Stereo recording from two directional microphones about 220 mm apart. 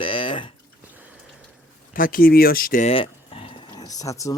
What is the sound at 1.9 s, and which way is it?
Speech, 40° left (ahead or behind).